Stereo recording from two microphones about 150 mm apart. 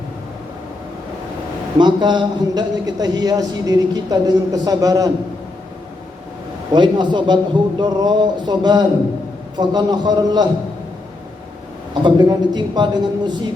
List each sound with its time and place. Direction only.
1.8 s a man's voice: 30° right (ahead or behind)
6.7 s a man's voice: 30° right (ahead or behind)
12.0 s a man's voice: 30° right (ahead or behind)